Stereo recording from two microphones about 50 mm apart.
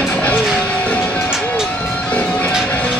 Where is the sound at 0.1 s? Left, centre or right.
Left.